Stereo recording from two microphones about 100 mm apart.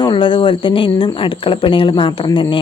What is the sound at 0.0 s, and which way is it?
Speech, 55° left (ahead or behind).